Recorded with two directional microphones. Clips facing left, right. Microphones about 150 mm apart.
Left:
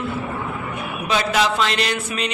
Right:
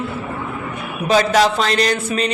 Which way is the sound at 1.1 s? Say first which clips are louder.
Right 6 dB; 40° right (ahead or behind).